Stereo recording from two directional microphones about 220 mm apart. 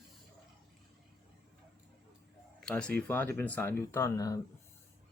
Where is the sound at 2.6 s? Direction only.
5° left (ahead or behind).